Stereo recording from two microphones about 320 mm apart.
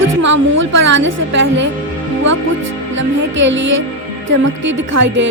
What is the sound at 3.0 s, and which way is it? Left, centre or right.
Music, right.